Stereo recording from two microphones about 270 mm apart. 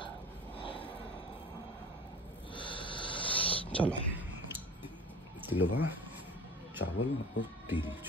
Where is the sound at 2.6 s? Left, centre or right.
Centre.